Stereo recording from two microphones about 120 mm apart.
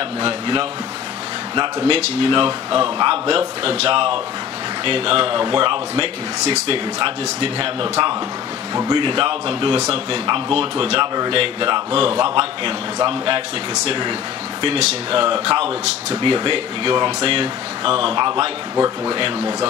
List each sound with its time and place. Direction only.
0.2 s speech: 45° right (ahead or behind)
6.4 s speech: 65° right (ahead or behind)
7.0 s speech: 45° right (ahead or behind)
8.7 s speech: 35° right (ahead or behind)
14.6 s speech: 55° right (ahead or behind)
16.1 s speech: 40° right (ahead or behind)